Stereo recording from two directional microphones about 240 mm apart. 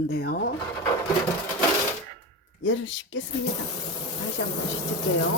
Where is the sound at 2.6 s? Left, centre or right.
Left.